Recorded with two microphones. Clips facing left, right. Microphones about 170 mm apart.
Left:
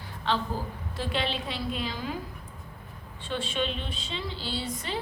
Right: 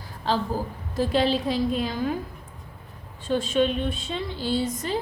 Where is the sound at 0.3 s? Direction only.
40° right (ahead or behind).